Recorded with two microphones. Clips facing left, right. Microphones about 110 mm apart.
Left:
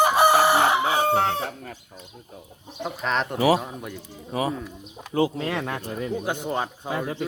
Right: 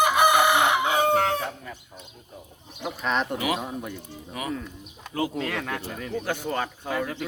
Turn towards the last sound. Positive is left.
turn(degrees=20)  # may be behind; listen again after turning